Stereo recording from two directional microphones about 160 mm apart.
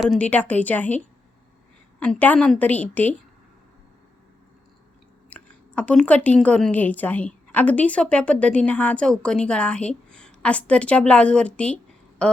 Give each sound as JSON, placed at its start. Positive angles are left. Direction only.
{"t": 0.0, "sound": "a woman's voice", "side_deg": 5}
{"t": 2.0, "sound": "a woman's voice", "side_deg": 10}
{"t": 5.3, "sound": "a woman's voice", "side_deg": 10}
{"t": 12.2, "sound": "a sound", "side_deg": 5}